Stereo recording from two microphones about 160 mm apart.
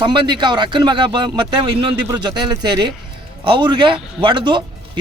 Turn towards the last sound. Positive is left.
turn(degrees=-30)  # may be behind; listen again after turning